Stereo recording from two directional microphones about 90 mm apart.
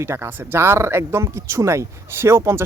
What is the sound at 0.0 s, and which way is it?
Speech, 30° right (ahead or behind).